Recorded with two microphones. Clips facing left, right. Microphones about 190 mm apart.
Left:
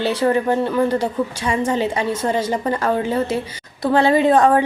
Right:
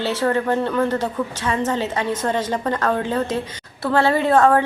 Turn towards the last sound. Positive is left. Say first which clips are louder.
# left 2 dB
turn(degrees=15)  # may be behind; listen again after turning